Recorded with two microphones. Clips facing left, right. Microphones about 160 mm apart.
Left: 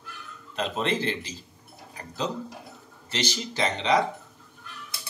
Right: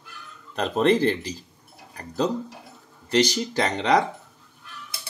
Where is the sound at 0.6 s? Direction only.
45° right (ahead or behind).